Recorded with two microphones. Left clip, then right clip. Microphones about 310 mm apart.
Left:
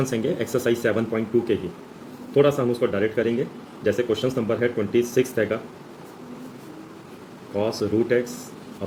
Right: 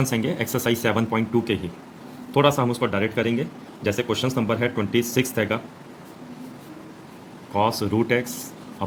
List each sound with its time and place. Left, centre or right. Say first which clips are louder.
0.0 s speech: left 1 dB; right
7.5 s speech: right 1 dB; right